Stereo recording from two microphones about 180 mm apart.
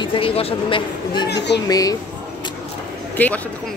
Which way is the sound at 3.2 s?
10° left (ahead or behind).